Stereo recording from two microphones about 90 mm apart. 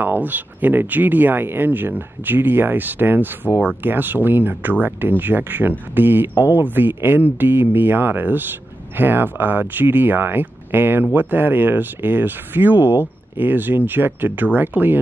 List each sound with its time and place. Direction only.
0.0 s speech: 20° right (ahead or behind)